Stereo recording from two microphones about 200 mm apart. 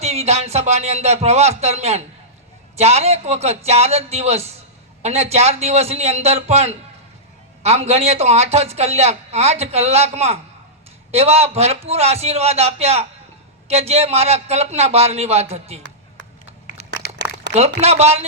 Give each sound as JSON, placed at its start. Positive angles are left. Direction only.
{"t": 0.0, "sound": "a man's voice", "side_deg": -30}
{"t": 17.7, "sound": "a man's voice", "side_deg": -30}